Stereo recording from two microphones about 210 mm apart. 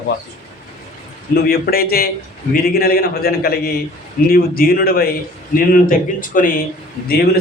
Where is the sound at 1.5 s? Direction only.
45° left (ahead or behind).